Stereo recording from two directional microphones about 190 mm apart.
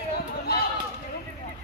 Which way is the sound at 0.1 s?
55° left (ahead or behind).